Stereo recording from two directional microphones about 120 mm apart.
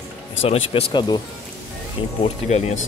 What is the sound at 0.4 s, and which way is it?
Speech, 55° left (ahead or behind).